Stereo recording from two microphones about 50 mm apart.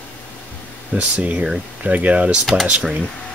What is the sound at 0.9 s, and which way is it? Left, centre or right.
Speech, right.